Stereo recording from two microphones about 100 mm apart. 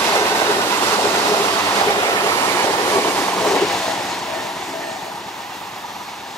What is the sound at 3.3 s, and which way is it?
Vehicle, 5° left (ahead or behind).